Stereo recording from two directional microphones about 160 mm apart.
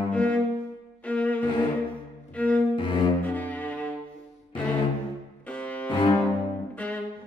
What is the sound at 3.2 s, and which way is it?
Cello, 10° left (ahead or behind).